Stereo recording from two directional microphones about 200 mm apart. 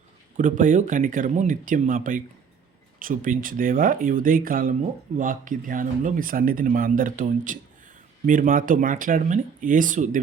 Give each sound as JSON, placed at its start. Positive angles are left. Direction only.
{"t": 0.3, "sound": "speech", "side_deg": -40}